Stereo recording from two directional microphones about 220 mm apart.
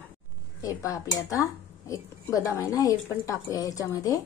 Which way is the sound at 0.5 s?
15° left (ahead or behind).